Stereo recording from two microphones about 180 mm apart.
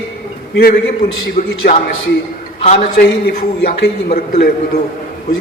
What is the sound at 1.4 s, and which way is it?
Speech, 40° left (ahead or behind).